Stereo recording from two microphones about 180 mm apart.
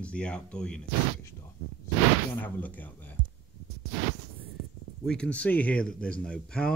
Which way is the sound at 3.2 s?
50° right (ahead or behind).